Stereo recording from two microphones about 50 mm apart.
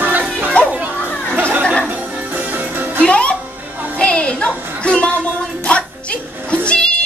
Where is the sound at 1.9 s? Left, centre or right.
Right.